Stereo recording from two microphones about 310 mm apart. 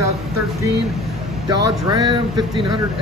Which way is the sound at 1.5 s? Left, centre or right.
Right.